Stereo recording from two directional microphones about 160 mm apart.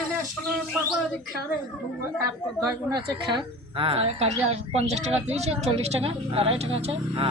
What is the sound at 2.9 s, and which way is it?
A woman's voice, 30° right (ahead or behind).